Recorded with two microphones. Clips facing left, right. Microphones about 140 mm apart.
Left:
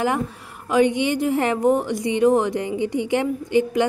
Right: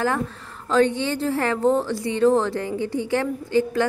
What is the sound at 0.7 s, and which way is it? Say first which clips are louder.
A woman's voice: left 1 dB; 15° left (ahead or behind).